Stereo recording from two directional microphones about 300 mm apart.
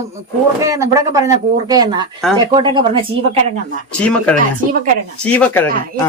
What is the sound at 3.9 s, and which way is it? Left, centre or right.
Speech, centre.